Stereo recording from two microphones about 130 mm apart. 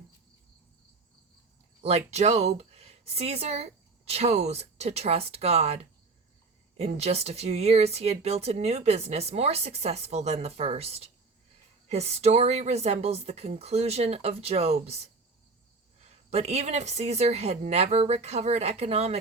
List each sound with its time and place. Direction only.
1.8 s speech: 55° right (ahead or behind)
16.3 s a woman's voice: 55° right (ahead or behind)